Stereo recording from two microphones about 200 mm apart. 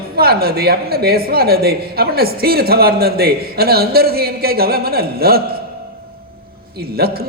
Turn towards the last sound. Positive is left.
turn(degrees=-50)  # may be behind; listen again after turning